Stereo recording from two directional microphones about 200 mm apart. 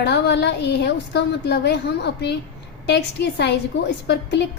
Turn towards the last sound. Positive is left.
turn(degrees=60)  # may be behind; listen again after turning